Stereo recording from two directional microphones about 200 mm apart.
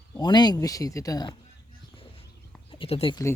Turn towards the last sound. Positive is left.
turn(degrees=30)  # may be behind; listen again after turning